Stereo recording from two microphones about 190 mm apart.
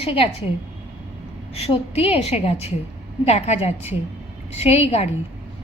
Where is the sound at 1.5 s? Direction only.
30° left (ahead or behind).